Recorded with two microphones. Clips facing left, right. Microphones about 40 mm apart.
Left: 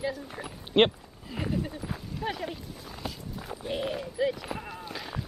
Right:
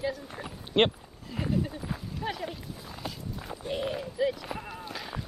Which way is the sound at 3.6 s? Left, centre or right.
Centre.